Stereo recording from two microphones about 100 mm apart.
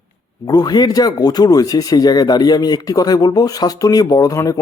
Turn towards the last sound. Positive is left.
turn(degrees=35)  # may be behind; listen again after turning